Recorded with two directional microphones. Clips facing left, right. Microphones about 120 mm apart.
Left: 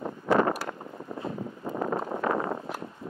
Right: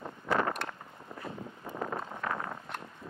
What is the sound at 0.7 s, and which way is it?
Wind noise, 30° left (ahead or behind).